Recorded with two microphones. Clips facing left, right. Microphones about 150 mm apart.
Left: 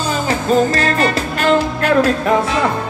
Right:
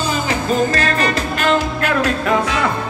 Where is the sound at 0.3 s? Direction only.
35° left (ahead or behind).